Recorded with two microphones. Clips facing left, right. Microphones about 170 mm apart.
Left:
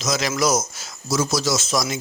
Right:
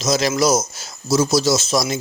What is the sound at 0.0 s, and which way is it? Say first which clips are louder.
A man's voice: right 4 dB; 35° right (ahead or behind).